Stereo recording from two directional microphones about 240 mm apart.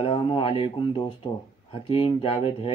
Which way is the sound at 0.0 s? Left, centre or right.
Left.